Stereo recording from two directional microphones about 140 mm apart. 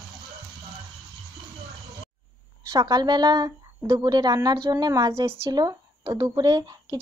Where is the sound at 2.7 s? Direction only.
30° right (ahead or behind).